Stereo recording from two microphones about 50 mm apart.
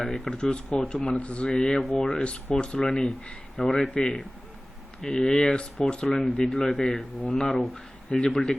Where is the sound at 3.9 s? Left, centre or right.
Left.